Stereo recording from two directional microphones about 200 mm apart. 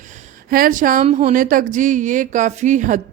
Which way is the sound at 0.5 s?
45° right (ahead or behind).